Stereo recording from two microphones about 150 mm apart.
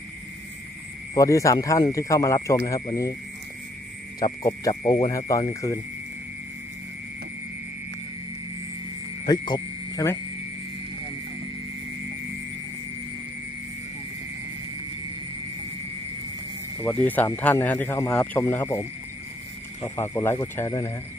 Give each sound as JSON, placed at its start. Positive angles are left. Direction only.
{"t": 1.1, "sound": "speech", "side_deg": 20}
{"t": 4.2, "sound": "speech", "side_deg": 25}
{"t": 9.2, "sound": "a sound", "side_deg": 30}
{"t": 16.8, "sound": "speech", "side_deg": 10}
{"t": 19.8, "sound": "speech", "side_deg": 15}